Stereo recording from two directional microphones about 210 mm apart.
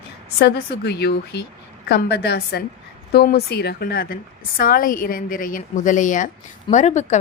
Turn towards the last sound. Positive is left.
turn(degrees=35)  # may be behind; listen again after turning